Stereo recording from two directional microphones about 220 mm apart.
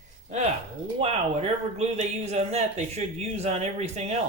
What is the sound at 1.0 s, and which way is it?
Speech, 30° right (ahead or behind).